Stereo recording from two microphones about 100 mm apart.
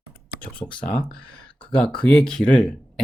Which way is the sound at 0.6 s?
45° left (ahead or behind).